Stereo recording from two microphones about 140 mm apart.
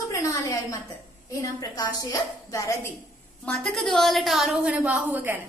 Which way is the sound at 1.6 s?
25° left (ahead or behind).